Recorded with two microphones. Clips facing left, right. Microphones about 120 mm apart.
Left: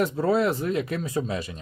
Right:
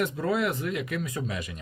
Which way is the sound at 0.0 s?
30° left (ahead or behind).